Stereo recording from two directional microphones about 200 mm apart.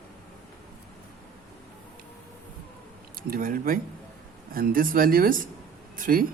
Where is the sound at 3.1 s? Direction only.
45° right (ahead or behind).